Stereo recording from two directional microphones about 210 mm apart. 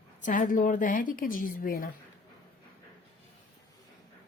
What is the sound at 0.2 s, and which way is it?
A woman's voice, 35° left (ahead or behind).